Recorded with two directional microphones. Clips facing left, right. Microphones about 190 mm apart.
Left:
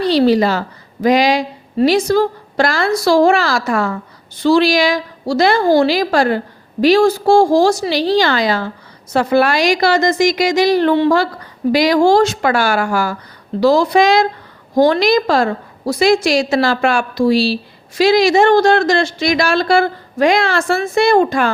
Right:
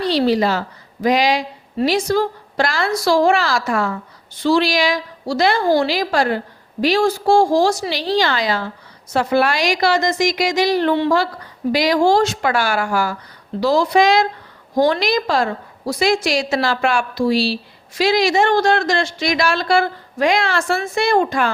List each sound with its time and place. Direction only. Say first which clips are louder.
0.1 s a woman's voice: left 4 dB; 45° left (ahead or behind)